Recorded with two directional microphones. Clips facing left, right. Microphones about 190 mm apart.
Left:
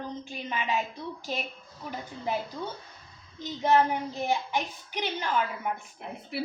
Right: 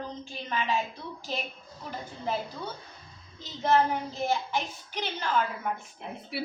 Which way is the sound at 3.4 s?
15° left (ahead or behind).